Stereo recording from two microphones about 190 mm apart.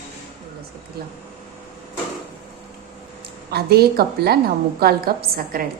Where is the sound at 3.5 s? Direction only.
55° right (ahead or behind).